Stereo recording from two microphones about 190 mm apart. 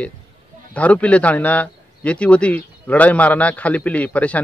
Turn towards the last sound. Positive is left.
turn(degrees=5)  # may be behind; listen again after turning